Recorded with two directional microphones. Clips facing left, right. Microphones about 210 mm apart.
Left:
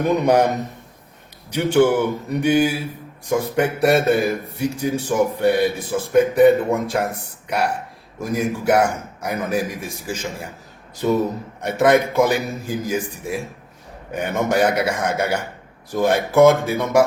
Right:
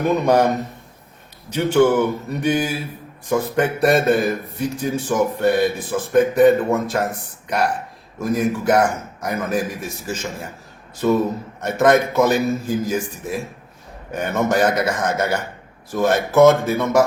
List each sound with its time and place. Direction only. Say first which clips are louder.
0.1 s a man's voice: even; 15° left (ahead or behind)
11.6 s a man's voice: even; 10° left (ahead or behind)